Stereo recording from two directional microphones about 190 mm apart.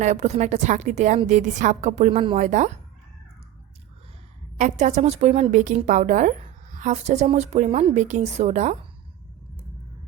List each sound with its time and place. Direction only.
0.0 s a woman's voice: 35° right (ahead or behind)
4.5 s a woman's voice: 40° right (ahead or behind)